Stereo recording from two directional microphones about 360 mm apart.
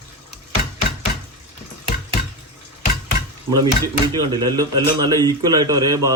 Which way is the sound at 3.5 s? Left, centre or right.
Centre.